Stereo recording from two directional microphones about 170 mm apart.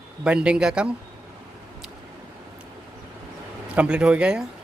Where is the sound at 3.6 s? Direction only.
5° right (ahead or behind).